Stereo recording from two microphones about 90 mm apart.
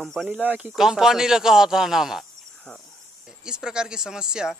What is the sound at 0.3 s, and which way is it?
Speech, 15° right (ahead or behind).